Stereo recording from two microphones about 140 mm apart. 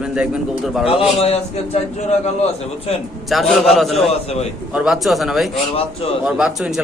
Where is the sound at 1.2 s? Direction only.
45° left (ahead or behind).